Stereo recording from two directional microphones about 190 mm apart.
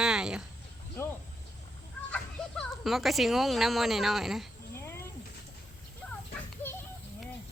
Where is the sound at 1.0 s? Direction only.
10° left (ahead or behind).